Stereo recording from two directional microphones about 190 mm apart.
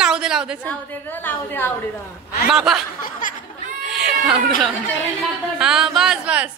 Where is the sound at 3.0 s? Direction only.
45° left (ahead or behind).